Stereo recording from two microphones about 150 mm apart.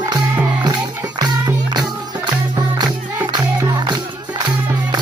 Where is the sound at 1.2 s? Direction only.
25° right (ahead or behind).